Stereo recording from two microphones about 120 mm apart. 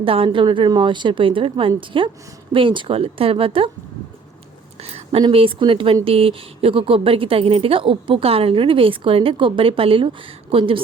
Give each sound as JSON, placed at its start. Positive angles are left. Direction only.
{"t": 0.0, "sound": "a woman's voice", "side_deg": -50}
{"t": 4.8, "sound": "a sound", "side_deg": -60}
{"t": 5.3, "sound": "a woman's voice", "side_deg": -50}